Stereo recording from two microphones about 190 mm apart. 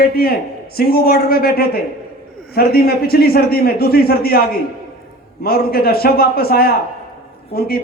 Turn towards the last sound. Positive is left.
turn(degrees=55)  # may be behind; listen again after turning